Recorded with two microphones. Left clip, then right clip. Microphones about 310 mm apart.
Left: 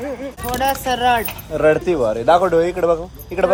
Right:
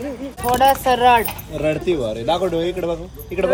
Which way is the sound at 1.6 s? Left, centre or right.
Centre.